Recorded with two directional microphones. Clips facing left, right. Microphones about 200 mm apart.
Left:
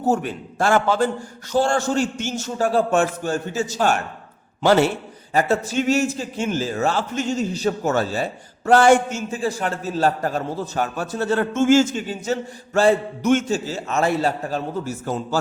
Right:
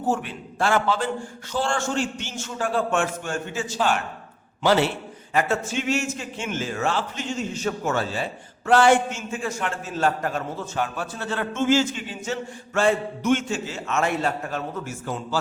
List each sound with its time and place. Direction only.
0.1 s a man's voice: 45° left (ahead or behind)
5.3 s a man's voice: 35° left (ahead or behind)